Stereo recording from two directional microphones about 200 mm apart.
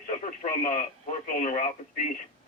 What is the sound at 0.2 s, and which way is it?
Speech, 40° left (ahead or behind).